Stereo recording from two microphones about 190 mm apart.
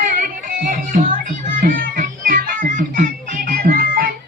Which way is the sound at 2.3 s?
45° right (ahead or behind).